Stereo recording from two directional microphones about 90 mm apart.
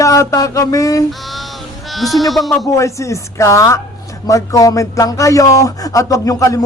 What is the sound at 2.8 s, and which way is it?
Speech, 35° left (ahead or behind).